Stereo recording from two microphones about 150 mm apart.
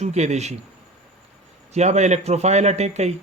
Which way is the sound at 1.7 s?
50° right (ahead or behind).